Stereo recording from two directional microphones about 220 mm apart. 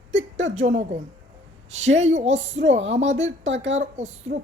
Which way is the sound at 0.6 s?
35° right (ahead or behind).